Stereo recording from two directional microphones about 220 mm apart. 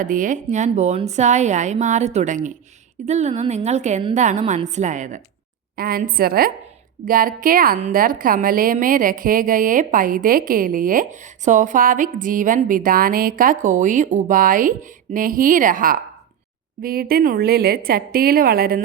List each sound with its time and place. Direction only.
0.0 s a woman's voice: 35° right (ahead or behind)